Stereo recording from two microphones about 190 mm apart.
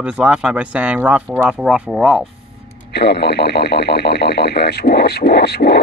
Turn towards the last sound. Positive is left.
turn(degrees=60)  # may be behind; listen again after turning